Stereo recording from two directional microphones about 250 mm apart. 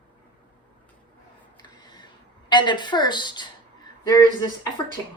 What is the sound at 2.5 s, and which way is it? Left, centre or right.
A woman's voice, centre.